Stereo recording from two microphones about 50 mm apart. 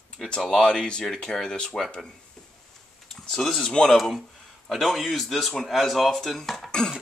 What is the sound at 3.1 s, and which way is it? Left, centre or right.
Speech, centre.